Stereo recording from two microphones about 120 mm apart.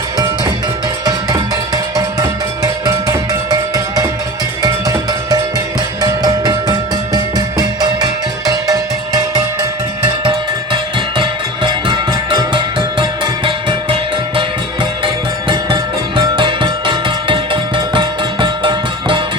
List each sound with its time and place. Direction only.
1.0 s music: 35° right (ahead or behind)
11.2 s music: 40° right (ahead or behind)